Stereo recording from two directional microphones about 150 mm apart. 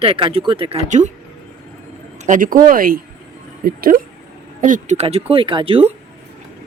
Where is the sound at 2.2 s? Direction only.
60° right (ahead or behind); by 4.0 s 80° right.